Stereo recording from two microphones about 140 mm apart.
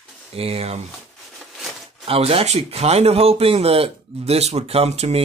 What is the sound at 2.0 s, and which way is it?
Speech, 45° right (ahead or behind).